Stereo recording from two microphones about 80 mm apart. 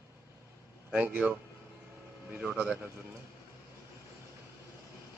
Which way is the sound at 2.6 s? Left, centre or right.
Centre.